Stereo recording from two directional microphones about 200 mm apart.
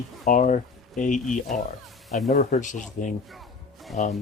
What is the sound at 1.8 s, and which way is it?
Music, centre (ahead or behind).